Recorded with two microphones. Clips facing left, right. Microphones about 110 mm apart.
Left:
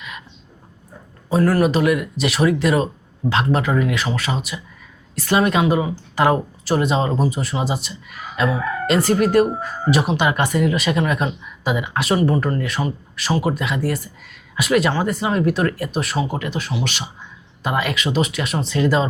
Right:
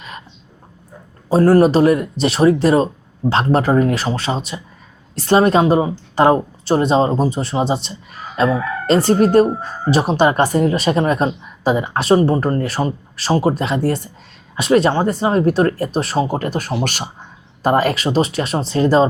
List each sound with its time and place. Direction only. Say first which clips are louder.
1.3 s speech: right 5 dB; 30° right (ahead or behind)